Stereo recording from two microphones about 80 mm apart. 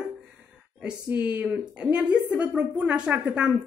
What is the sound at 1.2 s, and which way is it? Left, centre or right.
A woman's voice, centre.